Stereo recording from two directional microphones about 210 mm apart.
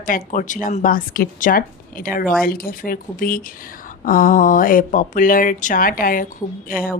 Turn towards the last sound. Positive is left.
turn(degrees=45)  # may be behind; listen again after turning